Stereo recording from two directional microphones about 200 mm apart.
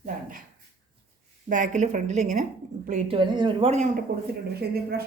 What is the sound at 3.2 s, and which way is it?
Speech, 25° right (ahead or behind).